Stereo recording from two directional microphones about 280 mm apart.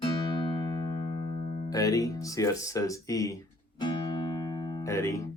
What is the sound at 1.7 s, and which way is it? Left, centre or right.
Speech, centre.